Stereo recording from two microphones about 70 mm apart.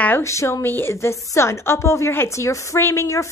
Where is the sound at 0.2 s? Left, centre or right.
Left.